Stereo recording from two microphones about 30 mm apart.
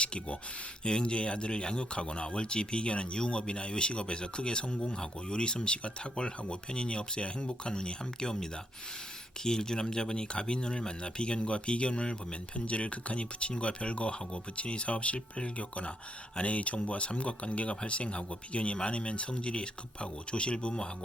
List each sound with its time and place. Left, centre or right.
0.0 s speech: left